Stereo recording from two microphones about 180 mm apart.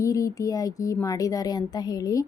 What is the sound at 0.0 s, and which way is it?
A woman's voice, 20° left (ahead or behind).